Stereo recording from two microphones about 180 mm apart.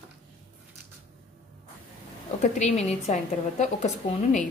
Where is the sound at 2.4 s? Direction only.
40° left (ahead or behind).